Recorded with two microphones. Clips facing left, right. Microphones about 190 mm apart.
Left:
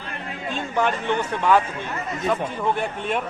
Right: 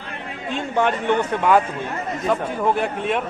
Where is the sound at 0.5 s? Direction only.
15° right (ahead or behind).